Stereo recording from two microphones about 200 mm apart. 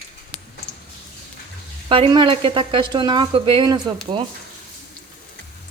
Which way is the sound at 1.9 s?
25° right (ahead or behind).